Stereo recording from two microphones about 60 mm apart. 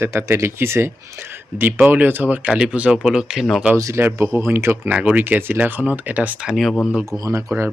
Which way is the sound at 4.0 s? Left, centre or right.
Right.